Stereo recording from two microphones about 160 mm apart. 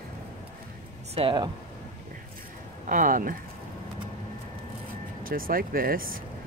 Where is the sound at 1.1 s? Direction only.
30° right (ahead or behind).